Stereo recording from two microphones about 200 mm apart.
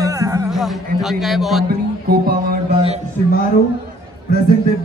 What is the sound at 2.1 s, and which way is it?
Music, 50° right (ahead or behind).